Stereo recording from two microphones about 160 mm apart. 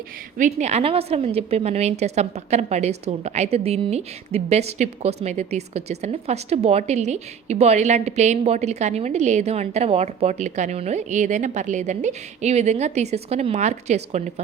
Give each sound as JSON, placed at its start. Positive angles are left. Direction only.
{"t": 0.3, "sound": "a woman's voice", "side_deg": -50}